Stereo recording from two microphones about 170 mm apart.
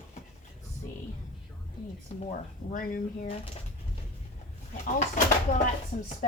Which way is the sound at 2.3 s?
55° left (ahead or behind).